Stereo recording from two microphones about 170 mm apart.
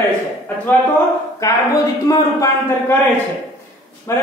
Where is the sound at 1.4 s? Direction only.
20° left (ahead or behind).